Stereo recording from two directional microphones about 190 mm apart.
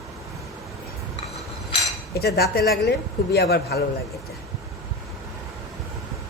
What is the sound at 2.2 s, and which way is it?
A man's voice, 55° left (ahead or behind).